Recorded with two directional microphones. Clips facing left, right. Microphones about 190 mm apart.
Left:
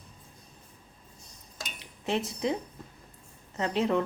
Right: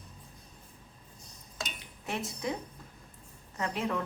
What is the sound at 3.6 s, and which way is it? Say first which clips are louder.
Speech: left 6 dB; 30° left (ahead or behind).